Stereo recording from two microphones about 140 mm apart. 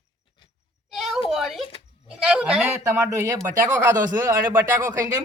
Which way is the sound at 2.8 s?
20° right (ahead or behind).